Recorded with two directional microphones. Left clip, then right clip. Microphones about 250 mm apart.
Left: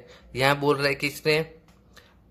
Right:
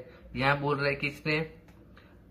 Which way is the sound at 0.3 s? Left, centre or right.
Left.